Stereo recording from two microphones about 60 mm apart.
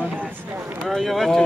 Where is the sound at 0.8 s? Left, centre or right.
Centre.